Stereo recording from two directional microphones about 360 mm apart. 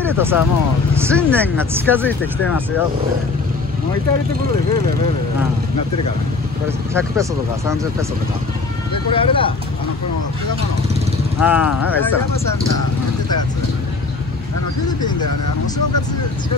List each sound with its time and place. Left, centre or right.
0.0 s speech: centre
6.9 s speech: centre
8.9 s speech: centre
11.3 s speech: centre